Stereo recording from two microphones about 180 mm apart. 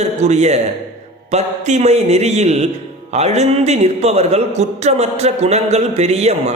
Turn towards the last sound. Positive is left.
turn(degrees=-35)  # may be behind; listen again after turning